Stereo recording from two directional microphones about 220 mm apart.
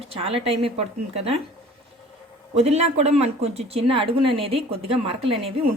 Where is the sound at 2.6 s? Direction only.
30° right (ahead or behind).